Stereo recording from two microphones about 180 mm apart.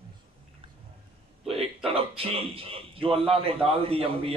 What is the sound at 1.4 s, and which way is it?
A man's voice, 30° right (ahead or behind).